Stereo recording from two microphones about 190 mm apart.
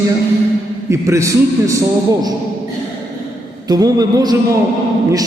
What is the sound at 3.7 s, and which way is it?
Speech, 20° right (ahead or behind).